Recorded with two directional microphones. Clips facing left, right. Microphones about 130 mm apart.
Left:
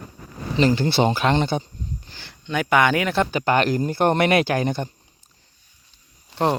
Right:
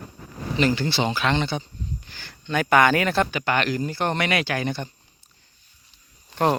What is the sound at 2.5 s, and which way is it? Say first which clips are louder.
Speech: even; 15° left (ahead or behind).